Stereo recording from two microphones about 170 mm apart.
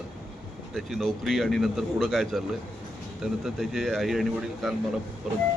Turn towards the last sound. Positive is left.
turn(degrees=0)  # may be behind; listen again after turning